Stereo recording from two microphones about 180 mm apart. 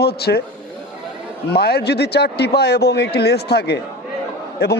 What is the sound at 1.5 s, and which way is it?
A man's voice, 65° left (ahead or behind).